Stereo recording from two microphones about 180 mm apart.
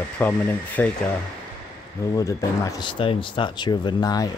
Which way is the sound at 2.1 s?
20° left (ahead or behind).